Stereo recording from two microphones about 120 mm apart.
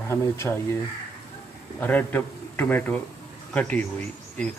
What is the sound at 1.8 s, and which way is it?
A man's voice, 15° left (ahead or behind).